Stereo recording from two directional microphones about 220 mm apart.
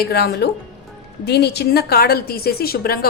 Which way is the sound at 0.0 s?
45° left (ahead or behind).